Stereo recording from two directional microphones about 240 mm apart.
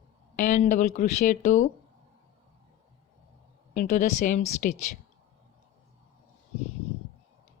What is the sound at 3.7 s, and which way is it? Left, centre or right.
Speech, left.